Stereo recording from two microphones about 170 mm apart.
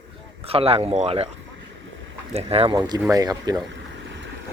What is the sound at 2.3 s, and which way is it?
Speech, 35° right (ahead or behind).